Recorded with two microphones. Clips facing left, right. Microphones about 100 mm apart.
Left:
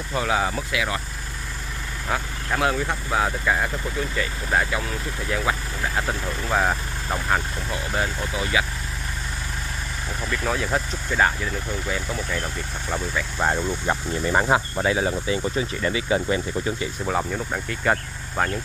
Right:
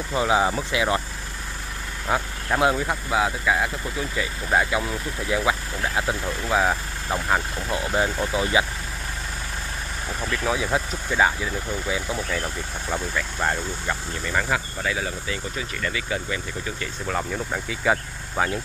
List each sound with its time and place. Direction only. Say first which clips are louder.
0.1 s speech: right 2 dB; 20° right (ahead or behind)
2.0 s speech: right 2 dB; 15° right (ahead or behind)
7.7 s speech: right 3 dB; 20° right (ahead or behind)
10.2 s speech: right 1 dB; 5° right (ahead or behind)
13.4 s speech: left 4 dB; 15° left (ahead or behind)
14.2 s speech: left 5 dB; 30° left (ahead or behind)
17.1 s speech: left 1 dB; 5° left (ahead or behind)